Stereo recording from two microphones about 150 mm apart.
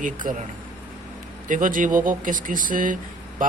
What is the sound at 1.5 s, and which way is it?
Speech, 60° right (ahead or behind).